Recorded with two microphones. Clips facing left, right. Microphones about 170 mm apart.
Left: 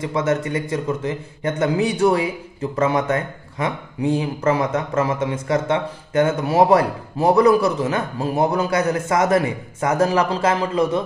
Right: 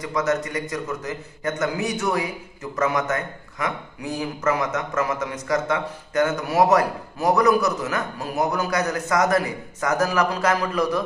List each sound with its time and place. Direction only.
0.0 s a man's voice: 25° left (ahead or behind)